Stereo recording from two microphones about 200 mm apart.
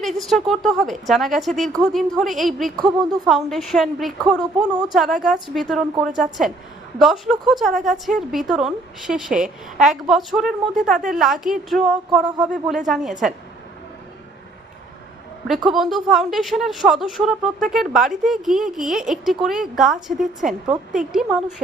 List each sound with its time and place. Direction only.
0.0 s a woman's voice: centre (ahead or behind)
2.7 s speech: 20° right (ahead or behind)
3.2 s a woman's voice: centre (ahead or behind)
15.4 s a woman's voice: centre (ahead or behind)